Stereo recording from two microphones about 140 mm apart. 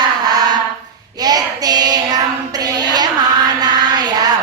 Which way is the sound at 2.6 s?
30° right (ahead or behind).